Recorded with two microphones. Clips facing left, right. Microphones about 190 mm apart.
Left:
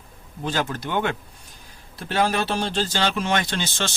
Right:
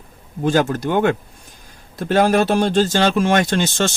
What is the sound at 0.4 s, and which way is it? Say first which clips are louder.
Speech: right 9 dB; 45° right (ahead or behind).